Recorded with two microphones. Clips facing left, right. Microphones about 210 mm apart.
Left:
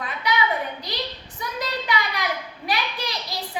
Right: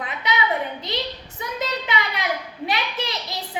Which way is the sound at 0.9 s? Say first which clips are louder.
Right 3 dB; 20° right (ahead or behind).